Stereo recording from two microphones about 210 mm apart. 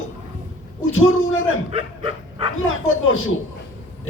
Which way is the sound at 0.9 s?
75° left (ahead or behind).